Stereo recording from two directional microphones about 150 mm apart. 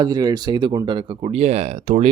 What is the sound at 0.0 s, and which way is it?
Speech, 25° right (ahead or behind).